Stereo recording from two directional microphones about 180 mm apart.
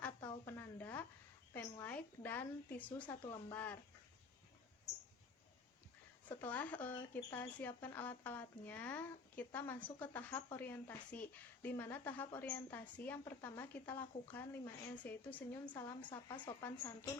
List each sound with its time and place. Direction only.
0.2 s a sound: 15° left (ahead or behind)
1.5 s speech: 10° left (ahead or behind)
3.1 s speech: 20° left (ahead or behind)
6.2 s speech: 10° left (ahead or behind)
16.0 s speech: 25° left (ahead or behind)